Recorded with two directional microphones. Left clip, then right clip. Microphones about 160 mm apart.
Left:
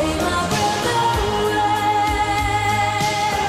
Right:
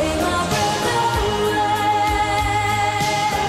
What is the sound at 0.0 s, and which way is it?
Music, centre (ahead or behind).